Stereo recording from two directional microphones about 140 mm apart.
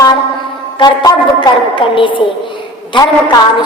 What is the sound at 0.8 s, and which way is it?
A woman's voice, 30° left (ahead or behind).